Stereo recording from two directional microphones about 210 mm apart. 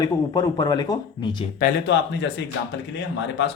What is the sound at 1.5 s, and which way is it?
Speech, 50° left (ahead or behind).